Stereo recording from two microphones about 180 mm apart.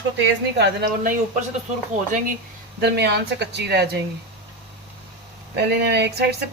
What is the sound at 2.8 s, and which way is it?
Speech, 65° right (ahead or behind).